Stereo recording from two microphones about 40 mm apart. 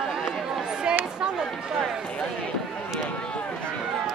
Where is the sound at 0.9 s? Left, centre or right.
Centre.